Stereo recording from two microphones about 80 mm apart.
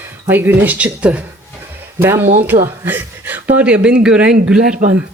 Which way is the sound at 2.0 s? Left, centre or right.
Right.